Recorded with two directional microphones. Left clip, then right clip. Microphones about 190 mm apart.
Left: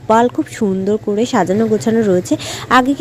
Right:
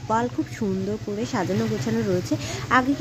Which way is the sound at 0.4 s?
40° left (ahead or behind).